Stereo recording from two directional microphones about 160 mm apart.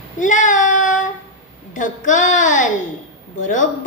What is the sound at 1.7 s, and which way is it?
A woman's voice, 55° left (ahead or behind).